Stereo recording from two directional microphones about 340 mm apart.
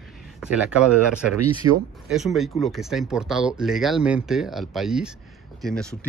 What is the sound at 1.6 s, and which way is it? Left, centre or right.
Speech, right.